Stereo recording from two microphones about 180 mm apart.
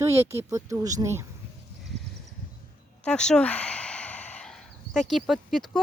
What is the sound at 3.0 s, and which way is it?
Sigh, 5° left (ahead or behind).